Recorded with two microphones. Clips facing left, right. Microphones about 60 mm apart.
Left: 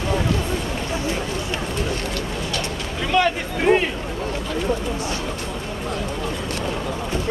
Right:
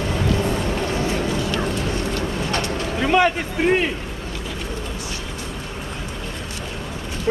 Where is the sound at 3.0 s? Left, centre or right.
Right.